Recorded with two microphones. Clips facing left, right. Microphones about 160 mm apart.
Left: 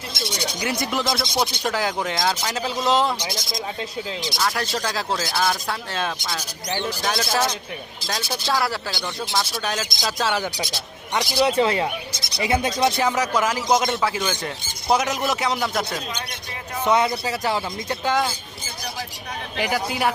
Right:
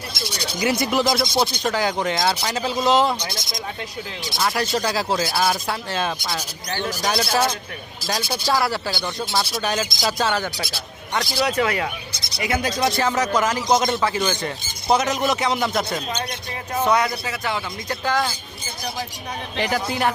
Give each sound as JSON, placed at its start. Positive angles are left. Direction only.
{"t": 0.1, "sound": "speech", "side_deg": 25}
{"t": 0.6, "sound": "speech", "side_deg": -5}
{"t": 4.4, "sound": "speech", "side_deg": -10}
{"t": 8.0, "sound": "speech", "side_deg": -5}
{"t": 10.3, "sound": "speech", "side_deg": 10}
{"t": 11.4, "sound": "speech", "side_deg": 25}
{"t": 12.8, "sound": "speech", "side_deg": 15}
{"t": 16.8, "sound": "speech", "side_deg": 25}
{"t": 18.0, "sound": "speech", "side_deg": 20}
{"t": 19.5, "sound": "speech", "side_deg": 10}